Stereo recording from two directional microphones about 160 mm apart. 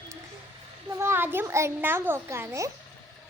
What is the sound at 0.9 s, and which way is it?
A child's voice, 15° right (ahead or behind).